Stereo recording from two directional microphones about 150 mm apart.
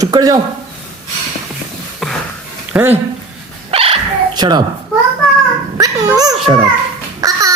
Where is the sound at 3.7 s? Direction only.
40° right (ahead or behind).